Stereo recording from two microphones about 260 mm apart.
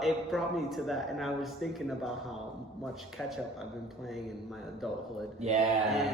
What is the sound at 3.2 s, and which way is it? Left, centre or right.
A man's voice, centre.